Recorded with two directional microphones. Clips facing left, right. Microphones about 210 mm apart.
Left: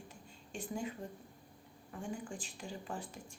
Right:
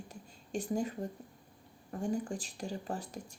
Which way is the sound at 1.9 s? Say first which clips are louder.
Right 8 dB; 40° right (ahead or behind).